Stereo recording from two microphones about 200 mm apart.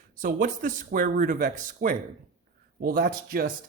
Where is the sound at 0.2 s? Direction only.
45° right (ahead or behind).